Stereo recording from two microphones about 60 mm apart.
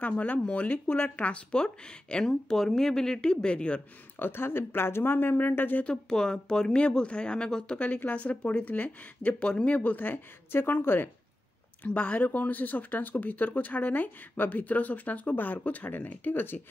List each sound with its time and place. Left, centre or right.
0.0 s speech: left
4.2 s speech: left
5.9 s speech: centre; by 11.1 s left
11.8 s speech: left